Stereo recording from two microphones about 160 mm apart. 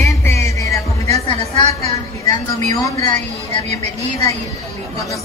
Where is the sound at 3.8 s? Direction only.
45° right (ahead or behind).